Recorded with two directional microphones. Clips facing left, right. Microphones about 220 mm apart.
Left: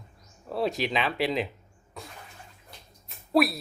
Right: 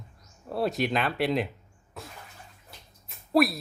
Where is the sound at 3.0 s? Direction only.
Centre (ahead or behind).